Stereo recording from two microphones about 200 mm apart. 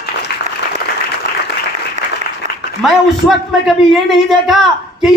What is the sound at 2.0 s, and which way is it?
Applause, 40° right (ahead or behind).